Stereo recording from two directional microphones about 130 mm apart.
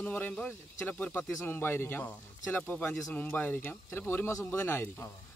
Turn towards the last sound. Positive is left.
turn(degrees=20)  # may be behind; listen again after turning